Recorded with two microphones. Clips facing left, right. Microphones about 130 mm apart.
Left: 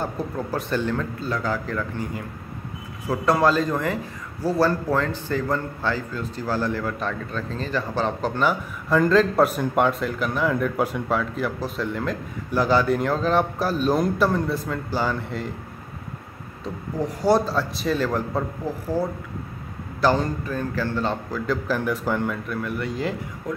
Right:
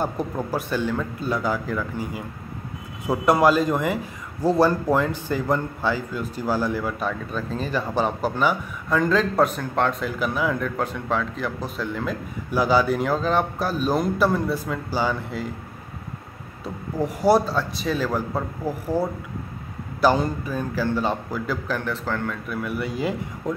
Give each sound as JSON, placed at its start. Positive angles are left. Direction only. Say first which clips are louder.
{"t": 0.0, "sound": "a man's voice", "louder": "right 2 dB", "side_deg": -10}
{"t": 16.6, "sound": "a man's voice", "louder": "right 1 dB", "side_deg": -10}
{"t": 20.0, "sound": "a man's voice", "louder": "right 1 dB", "side_deg": -10}
{"t": 21.6, "sound": "a man's voice", "louder": "left 3 dB", "side_deg": 10}
{"t": 22.5, "sound": "a man's voice", "louder": "even", "side_deg": -5}
{"t": 23.5, "sound": "speech", "louder": "right 2 dB", "side_deg": -25}